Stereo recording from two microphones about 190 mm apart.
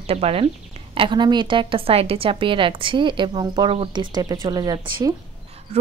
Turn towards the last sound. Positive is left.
turn(degrees=-25)  # may be behind; listen again after turning